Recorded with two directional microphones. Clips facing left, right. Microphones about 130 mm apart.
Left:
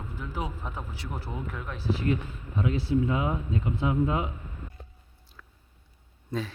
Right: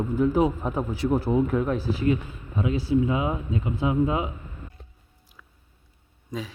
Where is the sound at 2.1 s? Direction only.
10° right (ahead or behind).